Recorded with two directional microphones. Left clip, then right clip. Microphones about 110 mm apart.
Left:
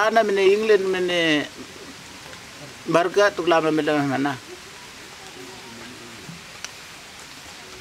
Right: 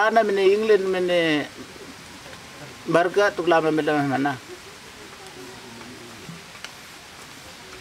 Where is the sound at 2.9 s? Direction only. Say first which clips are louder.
Left 1 dB; 5° left (ahead or behind).